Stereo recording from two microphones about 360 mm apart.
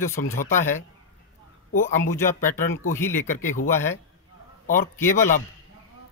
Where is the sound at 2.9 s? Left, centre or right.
Centre.